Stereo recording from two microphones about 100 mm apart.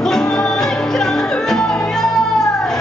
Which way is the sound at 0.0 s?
5° left (ahead or behind).